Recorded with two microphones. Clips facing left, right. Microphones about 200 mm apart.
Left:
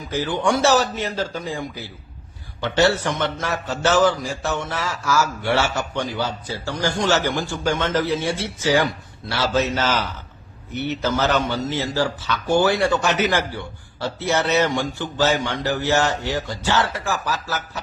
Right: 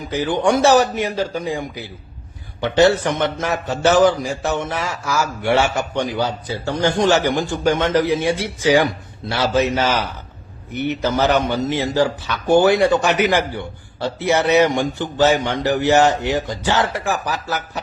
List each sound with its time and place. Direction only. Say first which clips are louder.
0.0 s a man's voice: right 4 dB; 15° right (ahead or behind)